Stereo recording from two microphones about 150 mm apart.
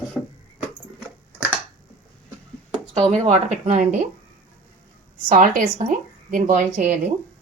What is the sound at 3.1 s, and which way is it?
Speech, 50° right (ahead or behind).